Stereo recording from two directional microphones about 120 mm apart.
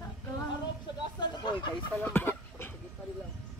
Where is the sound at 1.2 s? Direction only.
35° left (ahead or behind).